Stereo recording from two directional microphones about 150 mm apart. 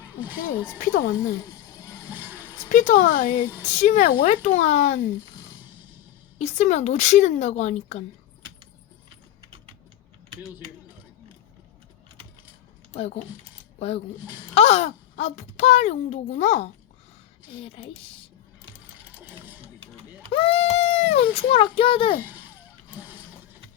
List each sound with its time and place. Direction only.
0.8 s speech: 60° left (ahead or behind)
2.0 s a sound: 10° right (ahead or behind)
2.7 s speech: 55° left (ahead or behind)
6.4 s speech: 50° left (ahead or behind)
12.9 s speech: 45° left (ahead or behind)
17.5 s speech: 40° left (ahead or behind)
19.2 s sewing machine: 10° right (ahead or behind)
19.6 s a sound: 35° right (ahead or behind)
20.3 s speech: 40° left (ahead or behind)